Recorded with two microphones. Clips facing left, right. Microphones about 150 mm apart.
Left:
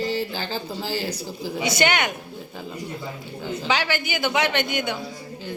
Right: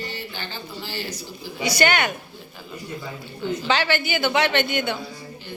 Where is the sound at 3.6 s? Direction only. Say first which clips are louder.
Right 1 dB; 10° left (ahead or behind).